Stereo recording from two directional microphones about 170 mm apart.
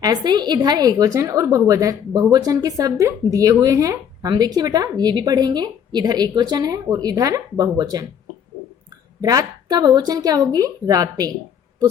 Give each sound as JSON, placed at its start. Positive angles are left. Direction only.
{"t": 0.0, "sound": "speech", "side_deg": -25}
{"t": 9.2, "sound": "speech", "side_deg": -20}